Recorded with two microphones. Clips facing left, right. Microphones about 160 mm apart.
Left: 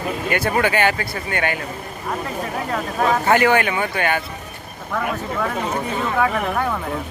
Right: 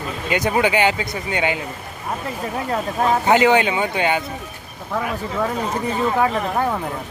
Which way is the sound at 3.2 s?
15° right (ahead or behind).